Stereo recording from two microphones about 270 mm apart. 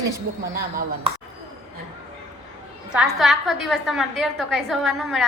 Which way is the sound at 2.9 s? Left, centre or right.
Centre.